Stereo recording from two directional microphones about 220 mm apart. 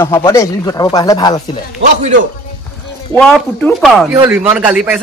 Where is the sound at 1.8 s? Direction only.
50° right (ahead or behind).